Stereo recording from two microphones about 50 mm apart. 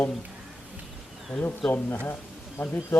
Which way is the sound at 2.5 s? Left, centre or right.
Left.